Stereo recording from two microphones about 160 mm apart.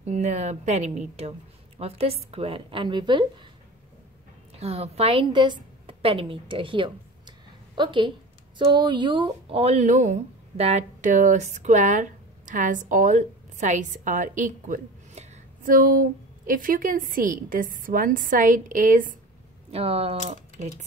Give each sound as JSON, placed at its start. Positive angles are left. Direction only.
{"t": 0.0, "sound": "a woman's voice", "side_deg": -45}
{"t": 4.6, "sound": "a woman's voice", "side_deg": -40}
{"t": 19.7, "sound": "a woman's voice", "side_deg": -40}